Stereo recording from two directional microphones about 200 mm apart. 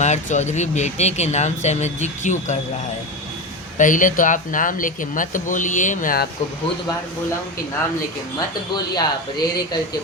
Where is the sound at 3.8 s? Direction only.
40° left (ahead or behind).